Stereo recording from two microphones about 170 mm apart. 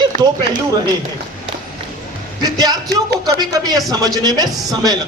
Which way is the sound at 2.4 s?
25° right (ahead or behind).